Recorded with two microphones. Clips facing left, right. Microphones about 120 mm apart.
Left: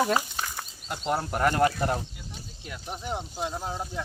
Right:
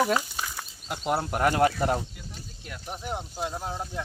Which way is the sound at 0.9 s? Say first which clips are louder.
Right 1 dB; 5° right (ahead or behind).